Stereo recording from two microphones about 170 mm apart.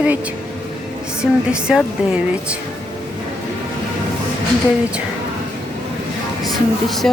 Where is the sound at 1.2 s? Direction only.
5° right (ahead or behind).